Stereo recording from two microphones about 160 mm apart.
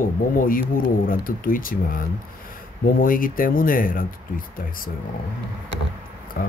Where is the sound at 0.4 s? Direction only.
60° left (ahead or behind).